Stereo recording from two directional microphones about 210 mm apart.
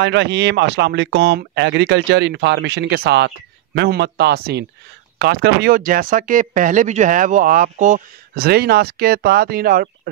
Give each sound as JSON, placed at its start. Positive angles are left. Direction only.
{"t": 0.0, "sound": "speech", "side_deg": -55}